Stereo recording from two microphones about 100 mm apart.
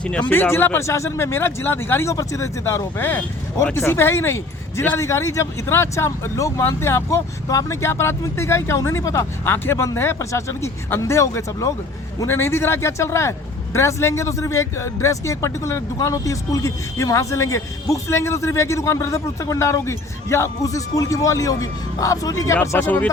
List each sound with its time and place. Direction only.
0.0 s speech: 10° left (ahead or behind); by 2.8 s 30° left (ahead or behind)
3.0 s speech: 20° left (ahead or behind)
22.8 s speech: 20° left (ahead or behind)